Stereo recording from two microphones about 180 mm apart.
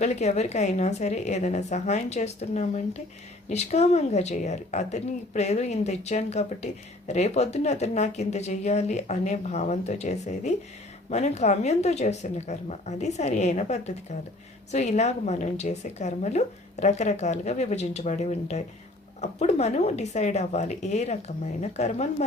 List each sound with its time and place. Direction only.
0.0 s a woman's voice: 40° left (ahead or behind)